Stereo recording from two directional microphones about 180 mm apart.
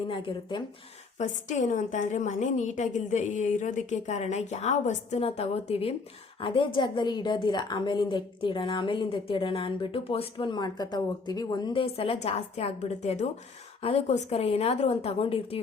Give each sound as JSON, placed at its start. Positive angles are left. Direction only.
{"t": 0.1, "sound": "a woman's voice", "side_deg": 25}
{"t": 1.2, "sound": "a woman's voice", "side_deg": 45}